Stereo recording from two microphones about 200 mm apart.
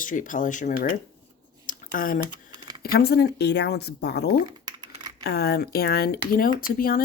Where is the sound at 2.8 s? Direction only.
50° left (ahead or behind).